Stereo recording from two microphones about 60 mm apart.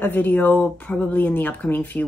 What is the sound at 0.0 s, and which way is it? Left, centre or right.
Speech, left.